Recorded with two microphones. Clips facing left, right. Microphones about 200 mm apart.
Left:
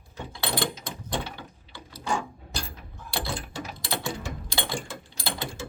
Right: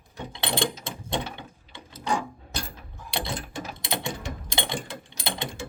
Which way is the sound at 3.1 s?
20° right (ahead or behind).